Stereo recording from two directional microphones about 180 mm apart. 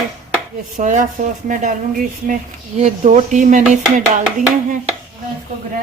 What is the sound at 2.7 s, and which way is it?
Speech, 40° right (ahead or behind).